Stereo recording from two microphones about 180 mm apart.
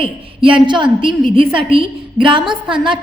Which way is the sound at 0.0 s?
30° right (ahead or behind).